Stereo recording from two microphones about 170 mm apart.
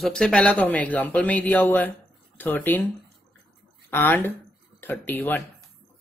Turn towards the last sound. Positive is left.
turn(degrees=10)  # may be behind; listen again after turning